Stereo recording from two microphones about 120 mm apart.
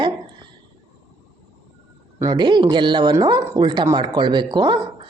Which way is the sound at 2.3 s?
40° right (ahead or behind).